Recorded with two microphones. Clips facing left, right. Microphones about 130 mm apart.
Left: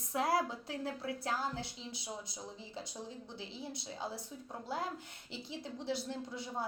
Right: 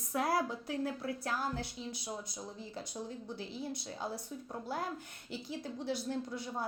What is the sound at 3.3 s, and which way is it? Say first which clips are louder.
Speech: right 4 dB; 55° right (ahead or behind).